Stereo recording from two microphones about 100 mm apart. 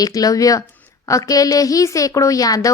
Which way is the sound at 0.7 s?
25° left (ahead or behind).